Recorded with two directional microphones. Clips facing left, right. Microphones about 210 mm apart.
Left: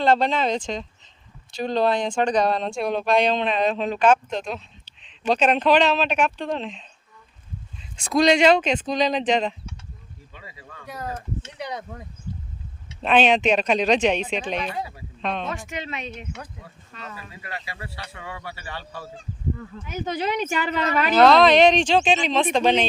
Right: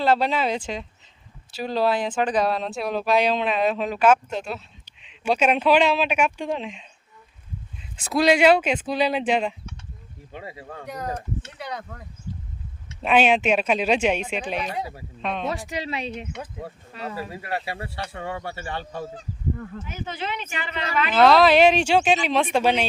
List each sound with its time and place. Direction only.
0.0 s speech: 5° right (ahead or behind)
7.9 s speech: 5° right (ahead or behind)
11.5 s speech: 20° left (ahead or behind)
13.0 s speech: 10° right (ahead or behind)
15.4 s speech: 35° right (ahead or behind)
19.9 s speech: 40° left (ahead or behind)
21.1 s speech: centre (ahead or behind)